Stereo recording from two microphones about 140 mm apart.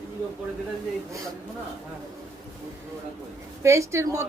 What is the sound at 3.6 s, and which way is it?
Speech, 20° right (ahead or behind).